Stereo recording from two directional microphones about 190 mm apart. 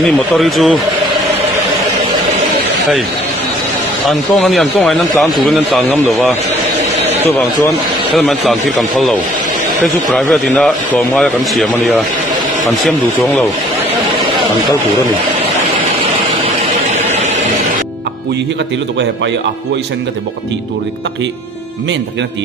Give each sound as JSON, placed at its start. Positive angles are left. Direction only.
{"t": 0.3, "sound": "speech", "side_deg": 0}
{"t": 4.1, "sound": "speech", "side_deg": 0}
{"t": 8.2, "sound": "speech", "side_deg": 0}
{"t": 10.1, "sound": "speech", "side_deg": 0}
{"t": 16.7, "sound": "vehicle", "side_deg": -35}